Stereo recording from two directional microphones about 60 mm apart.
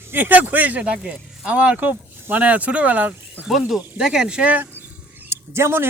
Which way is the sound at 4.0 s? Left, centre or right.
Centre.